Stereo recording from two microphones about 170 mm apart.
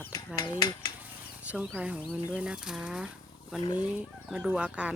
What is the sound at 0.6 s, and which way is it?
Dishes, 20° left (ahead or behind).